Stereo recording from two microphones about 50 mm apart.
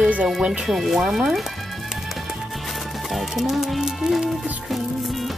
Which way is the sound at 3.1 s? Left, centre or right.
Centre.